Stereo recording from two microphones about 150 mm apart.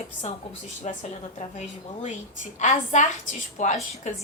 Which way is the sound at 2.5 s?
55° left (ahead or behind).